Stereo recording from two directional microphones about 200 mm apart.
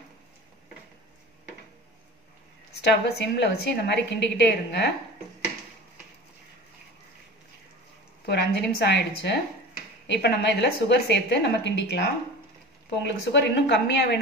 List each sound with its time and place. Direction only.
2.8 s a woman's voice: 55° left (ahead or behind)
8.3 s a woman's voice: 55° left (ahead or behind)